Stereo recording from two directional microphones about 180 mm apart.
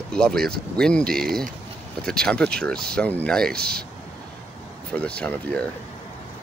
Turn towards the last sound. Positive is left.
turn(degrees=10)  # may be behind; listen again after turning